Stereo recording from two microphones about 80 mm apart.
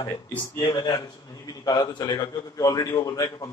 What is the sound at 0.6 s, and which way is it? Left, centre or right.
A man's voice, left.